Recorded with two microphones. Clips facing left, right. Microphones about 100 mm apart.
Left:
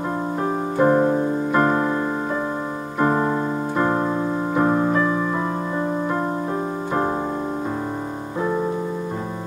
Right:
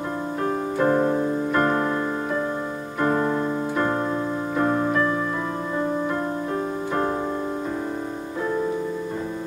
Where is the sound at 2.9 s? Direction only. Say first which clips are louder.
Left 2 dB; 15° left (ahead or behind).